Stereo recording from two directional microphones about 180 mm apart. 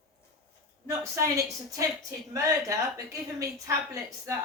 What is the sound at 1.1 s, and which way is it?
A woman's voice, 15° right (ahead or behind).